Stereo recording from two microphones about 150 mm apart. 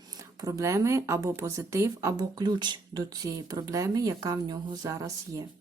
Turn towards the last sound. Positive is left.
turn(degrees=-20)  # may be behind; listen again after turning